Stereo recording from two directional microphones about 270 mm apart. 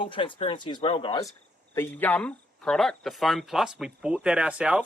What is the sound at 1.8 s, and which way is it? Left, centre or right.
Speech, centre.